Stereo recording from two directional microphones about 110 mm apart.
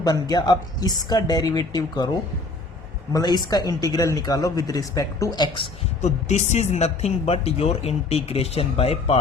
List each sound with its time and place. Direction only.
0.0 s speech: 40° left (ahead or behind)
3.1 s speech: 35° left (ahead or behind)
6.0 s speech: 90° left; by 9.1 s 65° left (ahead or behind)